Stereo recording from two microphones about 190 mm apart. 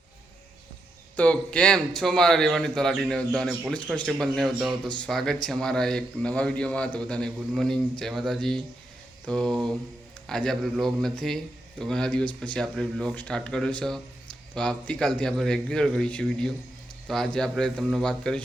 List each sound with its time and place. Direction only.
1.1 s speech: 5° left (ahead or behind)